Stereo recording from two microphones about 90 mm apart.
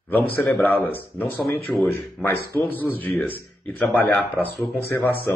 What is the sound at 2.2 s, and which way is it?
Speech, 20° left (ahead or behind).